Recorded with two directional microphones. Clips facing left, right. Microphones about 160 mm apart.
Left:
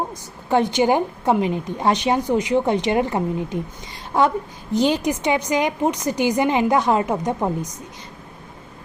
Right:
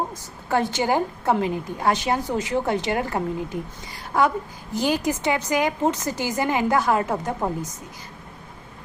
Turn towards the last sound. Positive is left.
turn(degrees=15)  # may be behind; listen again after turning